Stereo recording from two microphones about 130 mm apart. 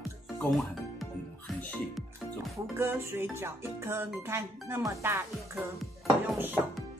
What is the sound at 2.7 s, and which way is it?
Music, 15° right (ahead or behind).